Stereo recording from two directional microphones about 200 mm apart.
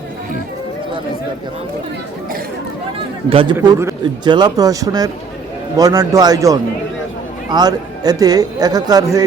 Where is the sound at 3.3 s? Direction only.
25° right (ahead or behind).